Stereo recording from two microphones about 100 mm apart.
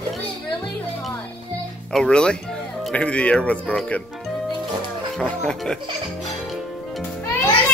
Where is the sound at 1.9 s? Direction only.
10° left (ahead or behind).